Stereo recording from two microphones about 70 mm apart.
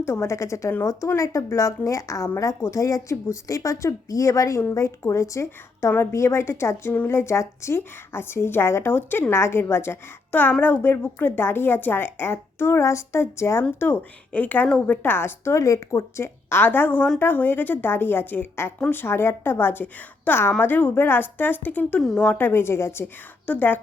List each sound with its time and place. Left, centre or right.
0.0 s a woman's voice: left
5.9 s a woman's voice: left
14.3 s a woman's voice: left
22.0 s a woman's voice: centre
22.3 s a woman's voice: left
23.5 s speech: left